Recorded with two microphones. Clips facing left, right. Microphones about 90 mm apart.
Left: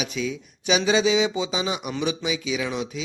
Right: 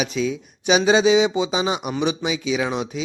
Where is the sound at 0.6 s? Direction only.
25° right (ahead or behind).